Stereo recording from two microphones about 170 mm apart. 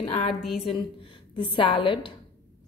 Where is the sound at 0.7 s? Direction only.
30° left (ahead or behind).